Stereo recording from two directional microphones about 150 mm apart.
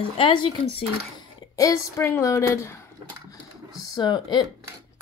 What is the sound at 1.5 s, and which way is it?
Speech, 20° left (ahead or behind).